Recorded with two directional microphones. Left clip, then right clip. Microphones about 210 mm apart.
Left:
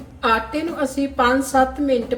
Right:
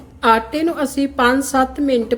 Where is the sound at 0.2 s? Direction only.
45° right (ahead or behind).